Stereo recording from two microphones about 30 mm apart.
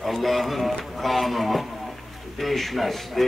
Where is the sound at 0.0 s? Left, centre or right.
Centre.